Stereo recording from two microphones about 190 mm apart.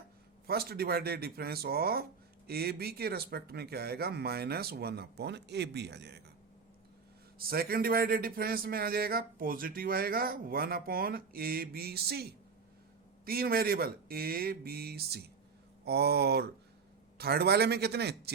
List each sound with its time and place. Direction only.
0.4 s speech: 55° right (ahead or behind)
7.3 s speech: 50° right (ahead or behind)